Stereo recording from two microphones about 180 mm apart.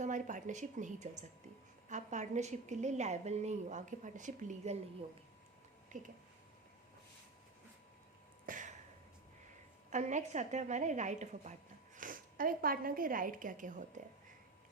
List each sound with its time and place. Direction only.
0.0 s a woman's voice: 45° right (ahead or behind)
5.9 s speech: 45° right (ahead or behind)
8.4 s a sound: 45° right (ahead or behind)
9.9 s a woman's voice: 40° right (ahead or behind)